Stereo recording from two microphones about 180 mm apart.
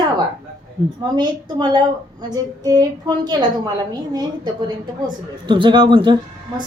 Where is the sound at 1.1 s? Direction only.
25° right (ahead or behind).